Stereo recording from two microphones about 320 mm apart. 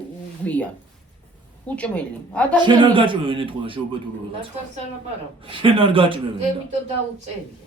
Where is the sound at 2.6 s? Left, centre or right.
Centre.